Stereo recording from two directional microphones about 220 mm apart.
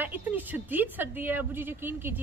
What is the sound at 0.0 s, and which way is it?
A woman's voice, 10° right (ahead or behind).